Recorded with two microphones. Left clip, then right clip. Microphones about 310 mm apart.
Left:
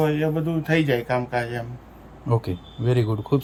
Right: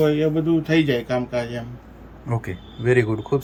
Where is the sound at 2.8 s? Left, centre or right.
Left.